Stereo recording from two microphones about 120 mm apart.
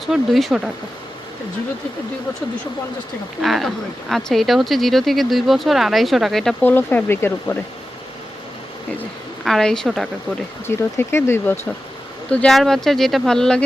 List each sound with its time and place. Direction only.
0.0 s speech: centre (ahead or behind)
3.4 s speech: centre (ahead or behind)
6.6 s speech: 15° left (ahead or behind)
9.4 s speech: 5° left (ahead or behind)
10.7 s speech: 20° left (ahead or behind)
12.3 s speech: 5° left (ahead or behind)